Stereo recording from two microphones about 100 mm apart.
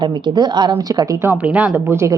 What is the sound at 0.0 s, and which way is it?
A woman's voice, 45° right (ahead or behind).